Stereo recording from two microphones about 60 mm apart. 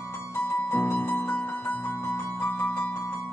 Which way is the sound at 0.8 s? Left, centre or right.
Left.